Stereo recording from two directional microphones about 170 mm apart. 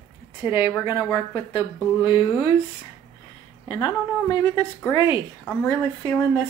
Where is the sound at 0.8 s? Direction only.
25° left (ahead or behind).